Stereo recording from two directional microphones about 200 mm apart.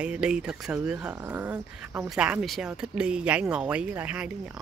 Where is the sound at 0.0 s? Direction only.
5° right (ahead or behind).